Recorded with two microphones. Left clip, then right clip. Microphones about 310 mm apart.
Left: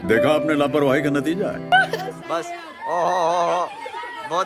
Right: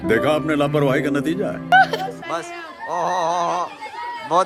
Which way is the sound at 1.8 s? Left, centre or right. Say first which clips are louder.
Right 3 dB; centre.